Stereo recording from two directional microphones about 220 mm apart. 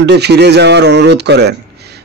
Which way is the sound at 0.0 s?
50° right (ahead or behind).